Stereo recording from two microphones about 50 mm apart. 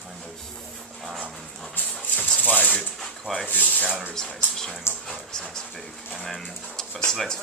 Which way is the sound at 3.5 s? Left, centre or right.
Left.